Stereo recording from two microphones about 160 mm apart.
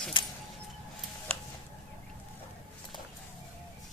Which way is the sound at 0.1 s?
30° left (ahead or behind).